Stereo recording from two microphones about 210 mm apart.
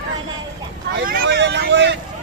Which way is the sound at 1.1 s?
45° right (ahead or behind).